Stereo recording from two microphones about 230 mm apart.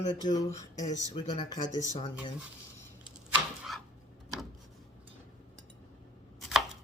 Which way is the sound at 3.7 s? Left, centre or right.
Centre.